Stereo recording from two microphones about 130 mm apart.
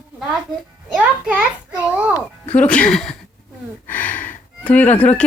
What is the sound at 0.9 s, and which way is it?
A child's voice, 10° right (ahead or behind).